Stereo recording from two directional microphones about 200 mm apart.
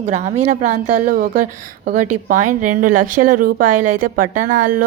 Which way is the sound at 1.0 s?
45° right (ahead or behind).